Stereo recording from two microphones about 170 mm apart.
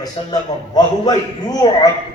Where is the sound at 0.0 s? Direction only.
25° left (ahead or behind).